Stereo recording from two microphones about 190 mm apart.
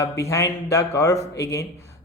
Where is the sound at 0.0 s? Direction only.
15° left (ahead or behind).